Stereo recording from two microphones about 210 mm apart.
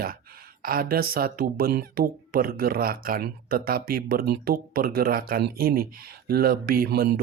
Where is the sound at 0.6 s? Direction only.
45° right (ahead or behind).